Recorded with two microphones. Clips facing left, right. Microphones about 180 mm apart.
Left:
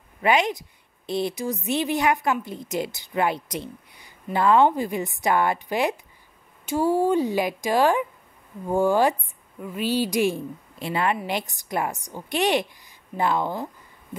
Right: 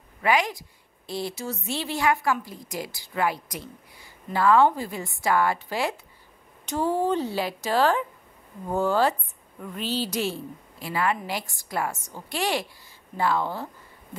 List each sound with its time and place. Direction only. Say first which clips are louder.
0.2 s a woman's voice: left 3 dB; 20° left (ahead or behind)